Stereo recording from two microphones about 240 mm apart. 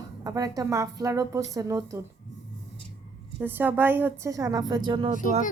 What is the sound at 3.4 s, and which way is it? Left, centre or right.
A woman's voice, centre.